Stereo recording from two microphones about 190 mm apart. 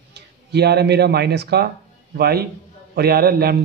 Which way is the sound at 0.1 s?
60° right (ahead or behind).